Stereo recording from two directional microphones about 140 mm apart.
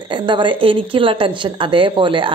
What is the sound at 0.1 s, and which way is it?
A woman's voice, 35° right (ahead or behind).